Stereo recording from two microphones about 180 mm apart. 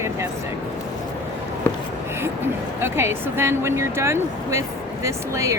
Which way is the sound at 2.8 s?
15° right (ahead or behind).